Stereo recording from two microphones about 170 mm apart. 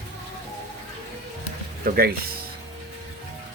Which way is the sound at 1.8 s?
60° right (ahead or behind).